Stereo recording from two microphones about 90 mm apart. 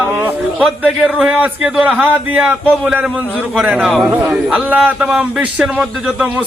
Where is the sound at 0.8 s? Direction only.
15° right (ahead or behind).